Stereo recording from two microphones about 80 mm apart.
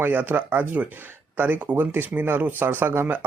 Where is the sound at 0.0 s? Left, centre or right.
Right.